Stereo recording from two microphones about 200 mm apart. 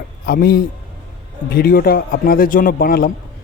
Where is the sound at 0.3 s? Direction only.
50° left (ahead or behind).